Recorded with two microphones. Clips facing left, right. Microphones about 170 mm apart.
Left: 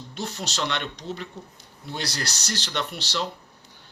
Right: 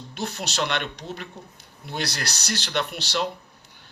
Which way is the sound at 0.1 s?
60° right (ahead or behind).